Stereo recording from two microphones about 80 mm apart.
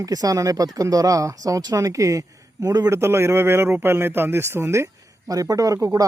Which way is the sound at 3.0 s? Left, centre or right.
Right.